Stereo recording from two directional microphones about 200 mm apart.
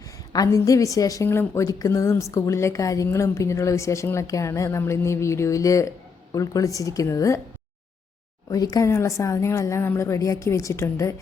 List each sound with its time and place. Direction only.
0.0 s a woman's voice: 15° left (ahead or behind)
8.4 s a woman's voice: 15° left (ahead or behind)